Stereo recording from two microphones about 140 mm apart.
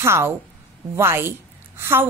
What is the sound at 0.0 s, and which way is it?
A woman's voice, 20° right (ahead or behind).